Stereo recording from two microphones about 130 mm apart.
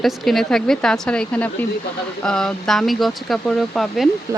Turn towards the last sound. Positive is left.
turn(degrees=0)  # may be behind; listen again after turning